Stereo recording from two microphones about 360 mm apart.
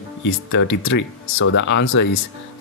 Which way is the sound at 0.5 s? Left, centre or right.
Left.